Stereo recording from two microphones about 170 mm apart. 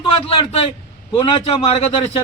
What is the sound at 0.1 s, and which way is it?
A man's voice, 35° left (ahead or behind).